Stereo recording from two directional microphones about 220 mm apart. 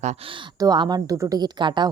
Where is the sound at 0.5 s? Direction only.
20° right (ahead or behind).